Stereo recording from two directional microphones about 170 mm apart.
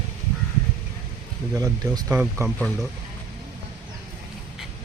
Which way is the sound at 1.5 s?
20° right (ahead or behind).